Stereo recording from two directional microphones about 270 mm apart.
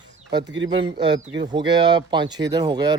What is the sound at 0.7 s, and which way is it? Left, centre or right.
A man's voice, centre.